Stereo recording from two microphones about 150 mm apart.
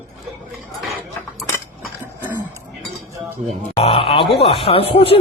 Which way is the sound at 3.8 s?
40° left (ahead or behind).